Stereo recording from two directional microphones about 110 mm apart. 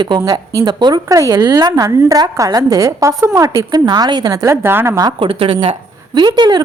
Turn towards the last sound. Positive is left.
turn(degrees=-45)  # may be behind; listen again after turning